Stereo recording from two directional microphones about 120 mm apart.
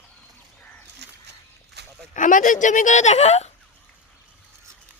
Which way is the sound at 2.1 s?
90° left.